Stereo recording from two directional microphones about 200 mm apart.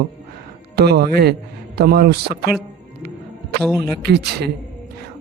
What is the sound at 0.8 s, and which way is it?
A man's voice, 50° right (ahead or behind).